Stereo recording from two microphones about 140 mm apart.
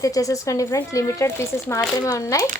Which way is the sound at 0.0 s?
25° left (ahead or behind).